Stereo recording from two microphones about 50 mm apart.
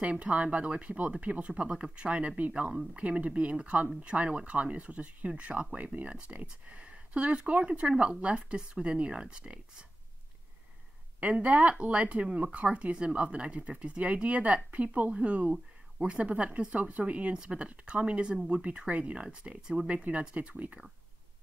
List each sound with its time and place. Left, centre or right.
0.0 s speech: right
11.1 s speech: right